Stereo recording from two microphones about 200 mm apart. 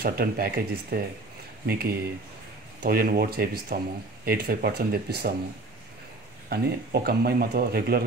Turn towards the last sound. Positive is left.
turn(degrees=-50)  # may be behind; listen again after turning